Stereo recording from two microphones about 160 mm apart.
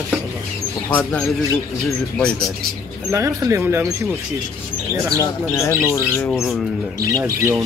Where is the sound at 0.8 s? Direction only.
10° left (ahead or behind).